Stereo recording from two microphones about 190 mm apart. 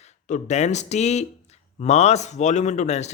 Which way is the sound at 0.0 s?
40° left (ahead or behind).